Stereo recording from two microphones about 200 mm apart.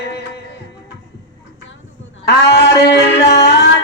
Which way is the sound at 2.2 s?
55° left (ahead or behind).